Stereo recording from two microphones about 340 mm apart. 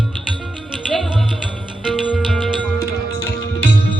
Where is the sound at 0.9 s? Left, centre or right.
Centre.